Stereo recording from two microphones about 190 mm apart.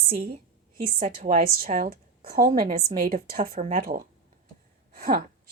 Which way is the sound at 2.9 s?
50° right (ahead or behind).